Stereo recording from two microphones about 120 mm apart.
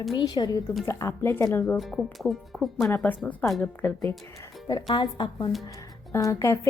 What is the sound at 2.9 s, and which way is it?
A woman's voice, 15° left (ahead or behind).